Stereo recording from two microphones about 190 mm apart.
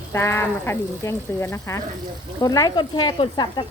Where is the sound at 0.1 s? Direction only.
15° left (ahead or behind).